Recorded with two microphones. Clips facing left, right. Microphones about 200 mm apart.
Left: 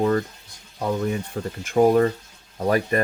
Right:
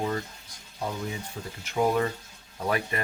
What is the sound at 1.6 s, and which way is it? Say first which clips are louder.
Speech: left 8 dB; 45° left (ahead or behind).